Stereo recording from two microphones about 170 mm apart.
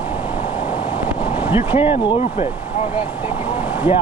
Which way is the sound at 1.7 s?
35° left (ahead or behind).